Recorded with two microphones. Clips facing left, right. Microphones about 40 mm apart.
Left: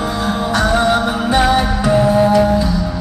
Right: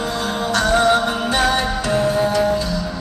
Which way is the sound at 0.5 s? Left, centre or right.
Centre.